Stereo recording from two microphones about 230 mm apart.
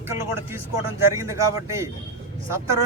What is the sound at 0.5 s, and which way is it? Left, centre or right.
Speech, centre.